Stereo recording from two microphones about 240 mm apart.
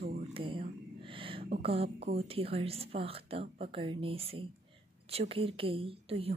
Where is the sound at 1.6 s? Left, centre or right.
Right.